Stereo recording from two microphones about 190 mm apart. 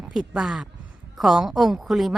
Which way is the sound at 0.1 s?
5° right (ahead or behind).